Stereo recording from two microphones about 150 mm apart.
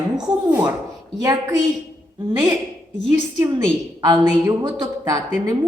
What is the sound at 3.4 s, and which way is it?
A woman's voice, 20° right (ahead or behind).